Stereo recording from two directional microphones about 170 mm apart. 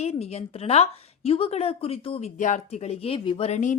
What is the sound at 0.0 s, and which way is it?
A woman's voice, 40° left (ahead or behind).